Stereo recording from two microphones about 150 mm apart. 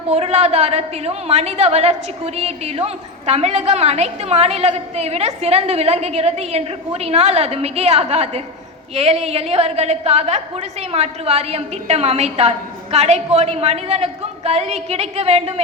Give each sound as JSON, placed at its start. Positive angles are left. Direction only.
{"t": 0.1, "sound": "a woman's voice", "side_deg": -45}